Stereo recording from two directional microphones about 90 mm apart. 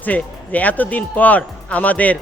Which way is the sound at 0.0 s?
15° left (ahead or behind).